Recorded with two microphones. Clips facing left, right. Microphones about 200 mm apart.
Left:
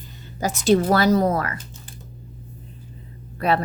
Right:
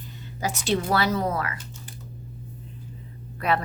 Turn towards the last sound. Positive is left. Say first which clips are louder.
# left 4 dB
turn(degrees=35)  # may be behind; listen again after turning